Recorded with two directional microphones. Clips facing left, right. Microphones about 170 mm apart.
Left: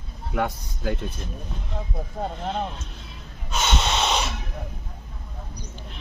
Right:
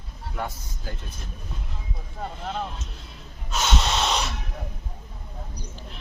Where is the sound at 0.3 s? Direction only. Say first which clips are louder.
Left 7 dB; 70° left (ahead or behind).